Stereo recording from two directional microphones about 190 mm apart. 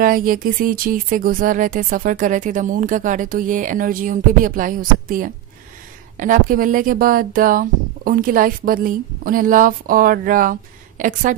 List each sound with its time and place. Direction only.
0.0 s speech: 45° right (ahead or behind)